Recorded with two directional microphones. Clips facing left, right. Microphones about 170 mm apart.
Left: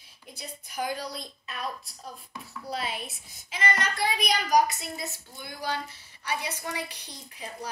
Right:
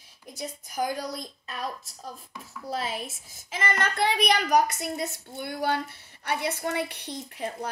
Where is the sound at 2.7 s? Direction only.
40° right (ahead or behind).